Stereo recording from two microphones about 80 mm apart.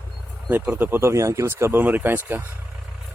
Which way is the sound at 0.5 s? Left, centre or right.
Right.